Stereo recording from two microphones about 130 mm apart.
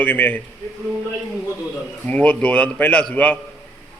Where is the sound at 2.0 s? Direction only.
10° left (ahead or behind).